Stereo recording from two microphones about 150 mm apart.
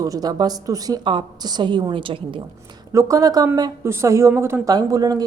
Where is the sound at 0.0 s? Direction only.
25° right (ahead or behind).